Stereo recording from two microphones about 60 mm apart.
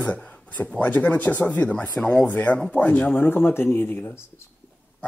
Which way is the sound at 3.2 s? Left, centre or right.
Left.